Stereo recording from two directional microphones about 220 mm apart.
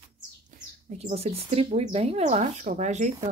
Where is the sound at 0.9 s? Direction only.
30° right (ahead or behind).